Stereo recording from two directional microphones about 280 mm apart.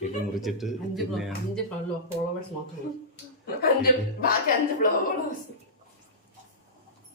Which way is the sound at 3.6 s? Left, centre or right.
Left.